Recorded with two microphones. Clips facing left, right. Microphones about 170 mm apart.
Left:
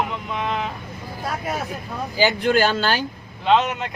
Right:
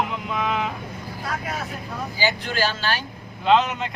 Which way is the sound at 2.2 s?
55° left (ahead or behind).